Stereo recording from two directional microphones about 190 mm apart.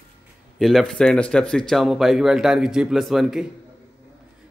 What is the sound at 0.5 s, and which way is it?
A man's voice, centre (ahead or behind).